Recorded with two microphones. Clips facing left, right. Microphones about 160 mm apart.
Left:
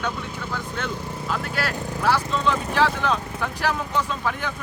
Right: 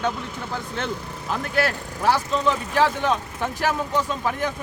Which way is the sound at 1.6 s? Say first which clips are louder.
Right 3 dB; 45° right (ahead or behind).